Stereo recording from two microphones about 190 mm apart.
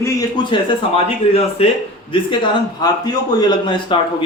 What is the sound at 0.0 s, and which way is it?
A man's voice, 20° left (ahead or behind).